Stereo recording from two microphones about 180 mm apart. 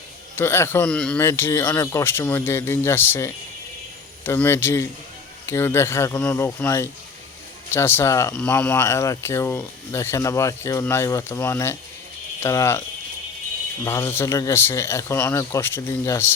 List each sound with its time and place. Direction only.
0.3 s speech: 15° left (ahead or behind)
1.3 s speech: 15° left (ahead or behind)
13.8 s speech: 15° left (ahead or behind)